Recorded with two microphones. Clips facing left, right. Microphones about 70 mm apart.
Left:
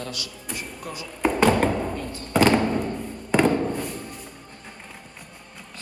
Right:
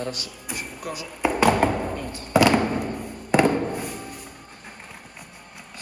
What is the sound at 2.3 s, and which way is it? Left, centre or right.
Music, centre.